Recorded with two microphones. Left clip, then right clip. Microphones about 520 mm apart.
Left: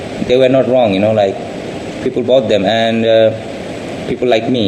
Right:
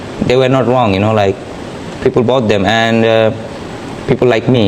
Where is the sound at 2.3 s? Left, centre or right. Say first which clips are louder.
Even; right.